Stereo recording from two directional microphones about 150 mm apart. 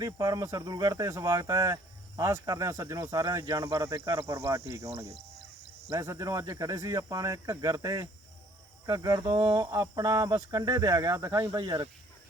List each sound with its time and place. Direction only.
0.0 s speech: 25° right (ahead or behind)
5.9 s speech: 20° right (ahead or behind)